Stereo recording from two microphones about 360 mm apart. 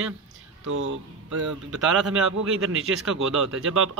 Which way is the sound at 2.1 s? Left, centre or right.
Right.